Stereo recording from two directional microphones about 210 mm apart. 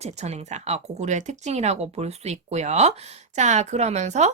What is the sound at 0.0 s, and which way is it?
Speech, 30° right (ahead or behind).